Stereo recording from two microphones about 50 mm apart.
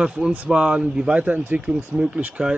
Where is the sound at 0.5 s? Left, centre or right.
Centre.